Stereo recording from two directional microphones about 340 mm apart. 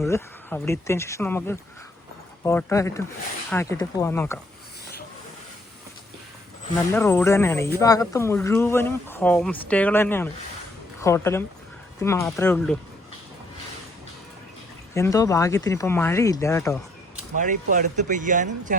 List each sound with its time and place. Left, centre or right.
0.0 s speech: centre
6.9 s speech: centre
14.9 s speech: centre
17.3 s speech: right